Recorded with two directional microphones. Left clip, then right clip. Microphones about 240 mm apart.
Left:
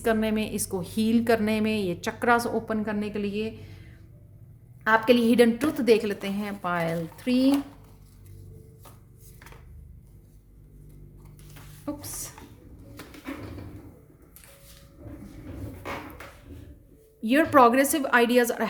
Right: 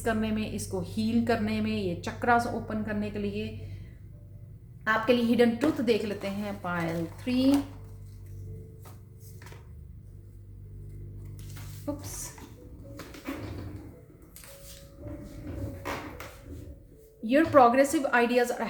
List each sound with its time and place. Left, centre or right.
0.0 s a woman's voice: left
4.8 s a woman's voice: left
11.9 s a woman's voice: left
17.2 s a woman's voice: left